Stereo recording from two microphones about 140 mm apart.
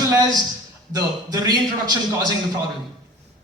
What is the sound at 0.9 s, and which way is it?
A man's voice, 30° right (ahead or behind).